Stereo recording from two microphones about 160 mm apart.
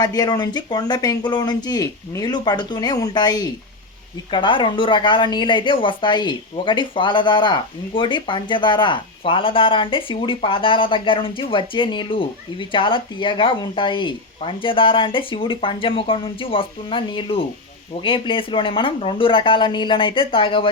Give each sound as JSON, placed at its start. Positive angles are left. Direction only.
{"t": 0.0, "sound": "speech", "side_deg": 25}